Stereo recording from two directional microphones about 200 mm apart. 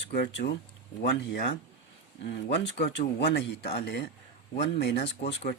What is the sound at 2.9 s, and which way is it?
Speech, 60° left (ahead or behind).